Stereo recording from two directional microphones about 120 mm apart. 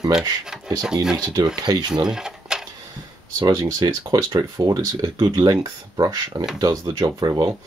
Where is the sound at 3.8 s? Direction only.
30° right (ahead or behind).